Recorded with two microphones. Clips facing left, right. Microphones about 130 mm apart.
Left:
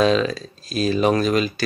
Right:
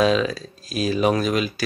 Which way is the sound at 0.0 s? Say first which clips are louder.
Left 1 dB; 5° right (ahead or behind).